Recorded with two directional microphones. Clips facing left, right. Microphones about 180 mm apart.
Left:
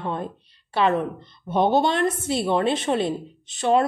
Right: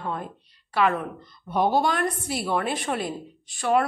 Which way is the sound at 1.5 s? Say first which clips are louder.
Left 3 dB; 25° left (ahead or behind).